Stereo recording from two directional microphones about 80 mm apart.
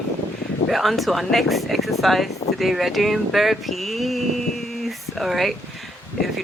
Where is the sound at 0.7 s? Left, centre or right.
Centre.